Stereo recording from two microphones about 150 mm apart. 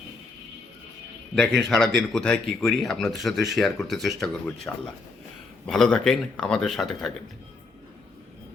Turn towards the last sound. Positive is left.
turn(degrees=0)  # may be behind; listen again after turning